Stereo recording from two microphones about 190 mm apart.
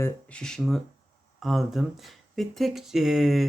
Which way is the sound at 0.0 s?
5° left (ahead or behind).